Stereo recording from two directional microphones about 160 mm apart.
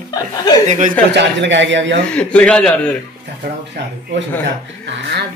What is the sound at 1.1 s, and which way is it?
Speech, 90° right.